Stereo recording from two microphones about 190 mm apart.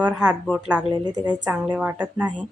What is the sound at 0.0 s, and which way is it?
Speech, 5° right (ahead or behind).